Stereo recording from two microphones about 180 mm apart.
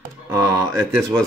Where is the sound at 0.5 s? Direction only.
15° right (ahead or behind).